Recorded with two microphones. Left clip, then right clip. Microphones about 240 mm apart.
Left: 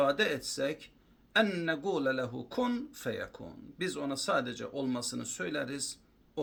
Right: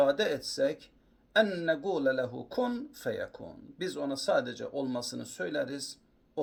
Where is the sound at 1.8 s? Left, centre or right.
Left.